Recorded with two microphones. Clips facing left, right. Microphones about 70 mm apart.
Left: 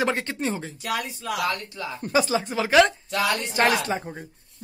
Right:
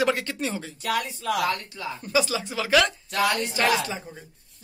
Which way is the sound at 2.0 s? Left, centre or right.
Left.